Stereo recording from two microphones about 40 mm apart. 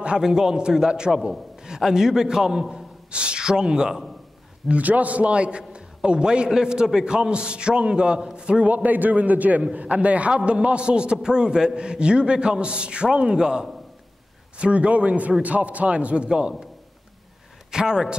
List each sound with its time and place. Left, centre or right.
0.2 s a man's voice: centre
3.1 s speech: right
4.6 s a man's voice: right
8.6 s a man's voice: right
16.3 s a man's voice: centre
17.6 s a man's voice: centre